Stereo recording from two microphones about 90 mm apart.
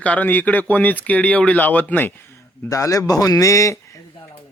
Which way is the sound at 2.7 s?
40° left (ahead or behind).